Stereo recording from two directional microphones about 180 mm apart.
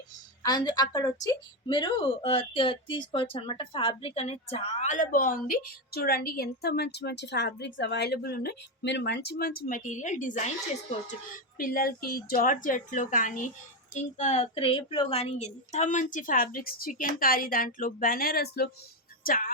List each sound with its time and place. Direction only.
0.4 s a woman's voice: 20° left (ahead or behind); by 10.5 s 45° left (ahead or behind)
11.5 s a woman's voice: 55° left (ahead or behind)